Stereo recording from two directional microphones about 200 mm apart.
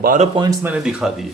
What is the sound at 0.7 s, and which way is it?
Speech, 5° right (ahead or behind).